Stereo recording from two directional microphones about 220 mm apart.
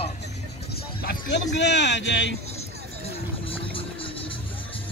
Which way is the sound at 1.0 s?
55° left (ahead or behind).